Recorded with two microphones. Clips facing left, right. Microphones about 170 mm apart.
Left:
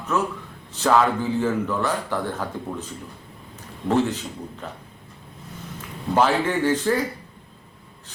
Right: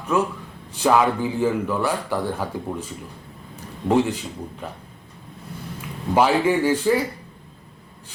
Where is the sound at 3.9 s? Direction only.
10° right (ahead or behind).